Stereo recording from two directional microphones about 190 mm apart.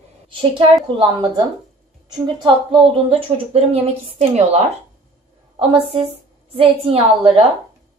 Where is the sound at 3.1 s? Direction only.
30° right (ahead or behind).